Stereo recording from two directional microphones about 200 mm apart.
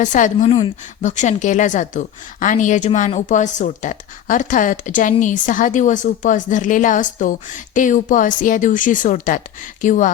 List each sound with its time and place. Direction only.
0.0 s a woman's voice: 40° left (ahead or behind)